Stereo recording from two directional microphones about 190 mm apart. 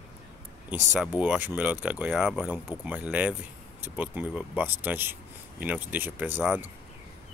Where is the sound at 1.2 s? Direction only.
10° right (ahead or behind).